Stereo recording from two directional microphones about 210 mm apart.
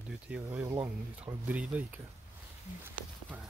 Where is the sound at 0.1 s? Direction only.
5° right (ahead or behind).